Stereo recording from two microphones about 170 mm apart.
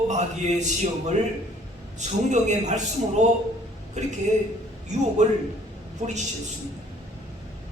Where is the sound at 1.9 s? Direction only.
45° right (ahead or behind).